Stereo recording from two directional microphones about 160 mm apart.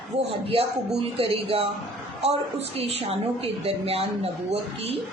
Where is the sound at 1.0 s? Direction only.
35° right (ahead or behind).